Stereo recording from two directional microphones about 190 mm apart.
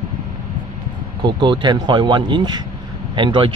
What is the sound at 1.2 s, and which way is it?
Speech, 25° right (ahead or behind).